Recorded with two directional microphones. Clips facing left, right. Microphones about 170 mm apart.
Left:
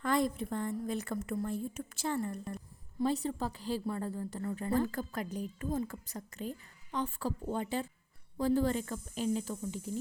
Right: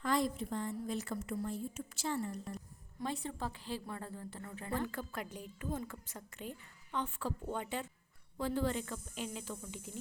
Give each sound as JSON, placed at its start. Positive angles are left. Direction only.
{"t": 0.0, "sound": "a woman's voice", "side_deg": 55}
{"t": 3.0, "sound": "a woman's voice", "side_deg": 35}